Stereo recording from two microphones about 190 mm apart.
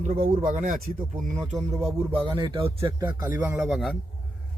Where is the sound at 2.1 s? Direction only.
25° right (ahead or behind).